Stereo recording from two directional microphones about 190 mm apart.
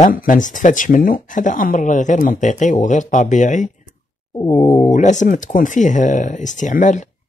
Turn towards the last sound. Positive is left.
turn(degrees=40)  # may be behind; listen again after turning